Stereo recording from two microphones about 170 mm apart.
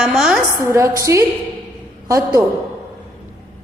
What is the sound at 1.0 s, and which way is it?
A woman's voice, 20° right (ahead or behind).